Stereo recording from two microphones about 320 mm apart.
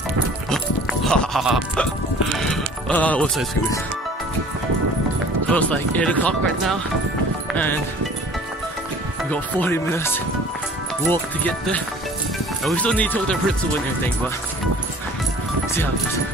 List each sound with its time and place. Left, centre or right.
0.5 s music: centre
2.3 s speech: centre
5.5 s speech: centre
9.3 s speech: centre